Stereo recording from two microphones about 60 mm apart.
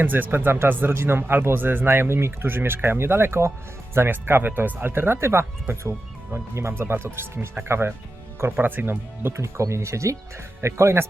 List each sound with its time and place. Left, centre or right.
0.0 s speech: right
8.5 s speech: right
9.3 s speech: right